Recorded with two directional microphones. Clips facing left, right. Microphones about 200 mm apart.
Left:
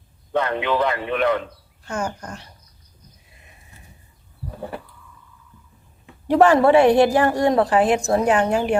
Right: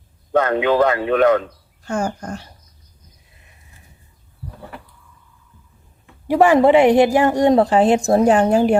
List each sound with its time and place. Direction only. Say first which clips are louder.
0.4 s a man's voice: right 6 dB; 45° right (ahead or behind)
6.2 s a woman's voice: right 2 dB; 10° right (ahead or behind); by 8.8 s 35° right (ahead or behind)